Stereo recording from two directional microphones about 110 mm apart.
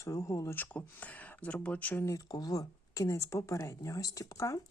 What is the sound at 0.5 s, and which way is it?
Speech, 15° left (ahead or behind).